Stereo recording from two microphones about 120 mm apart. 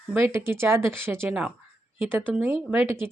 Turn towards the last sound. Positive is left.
turn(degrees=-20)  # may be behind; listen again after turning